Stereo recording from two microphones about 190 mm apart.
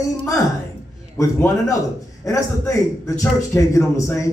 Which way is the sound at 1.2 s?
15° left (ahead or behind).